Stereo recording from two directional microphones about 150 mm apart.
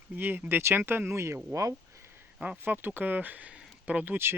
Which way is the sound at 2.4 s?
10° right (ahead or behind).